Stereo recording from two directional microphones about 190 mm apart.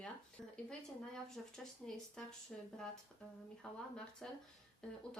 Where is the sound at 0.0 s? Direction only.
5° left (ahead or behind).